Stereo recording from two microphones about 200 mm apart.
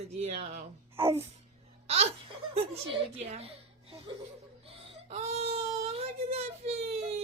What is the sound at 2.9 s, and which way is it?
A woman's voice, 30° right (ahead or behind).